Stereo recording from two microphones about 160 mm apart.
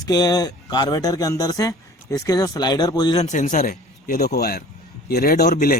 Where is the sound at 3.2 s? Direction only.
50° left (ahead or behind); by 5.5 s 70° left (ahead or behind).